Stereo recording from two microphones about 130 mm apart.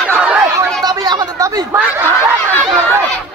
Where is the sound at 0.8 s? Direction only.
30° right (ahead or behind).